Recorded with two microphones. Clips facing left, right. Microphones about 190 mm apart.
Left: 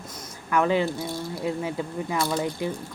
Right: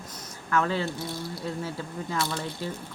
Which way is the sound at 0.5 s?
15° left (ahead or behind).